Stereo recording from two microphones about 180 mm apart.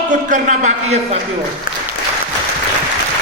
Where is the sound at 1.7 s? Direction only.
50° left (ahead or behind).